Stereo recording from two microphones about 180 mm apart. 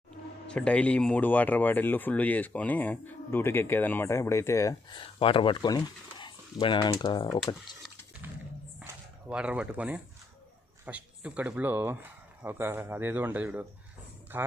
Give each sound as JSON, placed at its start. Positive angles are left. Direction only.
{"t": 0.4, "sound": "speech", "side_deg": 5}
{"t": 7.3, "sound": "speech", "side_deg": 0}
{"t": 7.8, "sound": "a sound", "side_deg": 0}
{"t": 9.3, "sound": "speech", "side_deg": -5}